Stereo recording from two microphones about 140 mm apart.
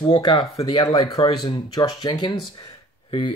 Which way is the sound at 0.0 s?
35° left (ahead or behind).